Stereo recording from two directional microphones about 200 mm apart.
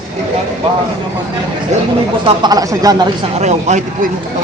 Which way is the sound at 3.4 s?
35° right (ahead or behind).